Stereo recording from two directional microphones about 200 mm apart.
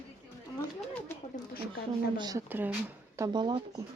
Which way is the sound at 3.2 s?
20° right (ahead or behind).